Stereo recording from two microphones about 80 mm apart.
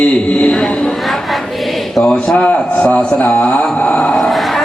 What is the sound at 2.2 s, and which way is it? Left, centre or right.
A man's voice, centre.